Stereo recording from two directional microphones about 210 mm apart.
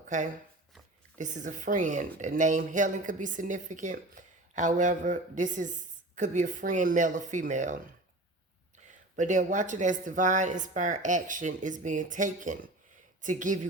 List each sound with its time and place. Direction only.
0.1 s speech: 35° right (ahead or behind)
9.1 s speech: 35° right (ahead or behind)